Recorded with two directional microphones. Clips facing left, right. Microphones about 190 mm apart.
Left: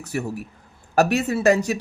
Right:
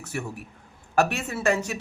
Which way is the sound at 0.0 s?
40° left (ahead or behind).